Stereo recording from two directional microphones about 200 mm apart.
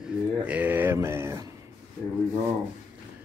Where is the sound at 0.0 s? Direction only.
5° right (ahead or behind).